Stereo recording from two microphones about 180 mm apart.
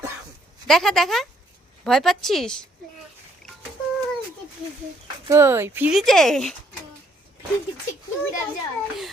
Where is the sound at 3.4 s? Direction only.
45° left (ahead or behind).